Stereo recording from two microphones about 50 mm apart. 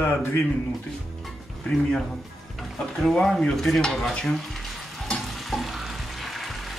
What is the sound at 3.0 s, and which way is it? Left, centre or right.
Stir, centre.